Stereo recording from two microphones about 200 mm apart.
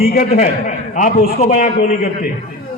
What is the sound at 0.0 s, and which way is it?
A man's voice, 50° left (ahead or behind).